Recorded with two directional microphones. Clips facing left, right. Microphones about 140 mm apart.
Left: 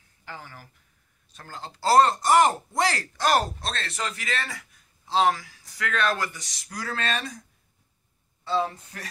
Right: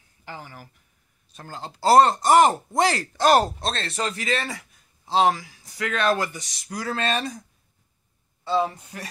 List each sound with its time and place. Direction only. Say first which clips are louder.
0.2 s speech: right 3 dB; 20° right (ahead or behind)
8.5 s speech: right 3 dB; 15° right (ahead or behind)